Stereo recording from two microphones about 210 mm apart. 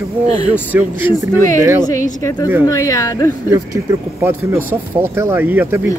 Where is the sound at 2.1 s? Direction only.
20° left (ahead or behind).